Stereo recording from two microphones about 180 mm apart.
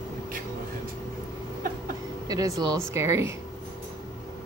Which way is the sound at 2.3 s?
20° right (ahead or behind).